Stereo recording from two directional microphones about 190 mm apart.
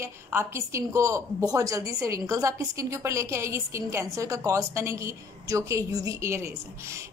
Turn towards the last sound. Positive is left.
turn(degrees=-15)  # may be behind; listen again after turning